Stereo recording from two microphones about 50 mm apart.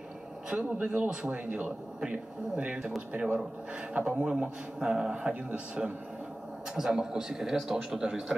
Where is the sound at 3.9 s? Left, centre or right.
Right.